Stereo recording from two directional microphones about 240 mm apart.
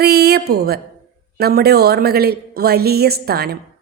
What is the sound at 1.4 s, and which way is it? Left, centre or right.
Speech, right.